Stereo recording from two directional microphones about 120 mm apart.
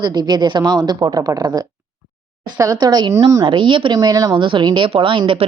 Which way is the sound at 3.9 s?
30° right (ahead or behind).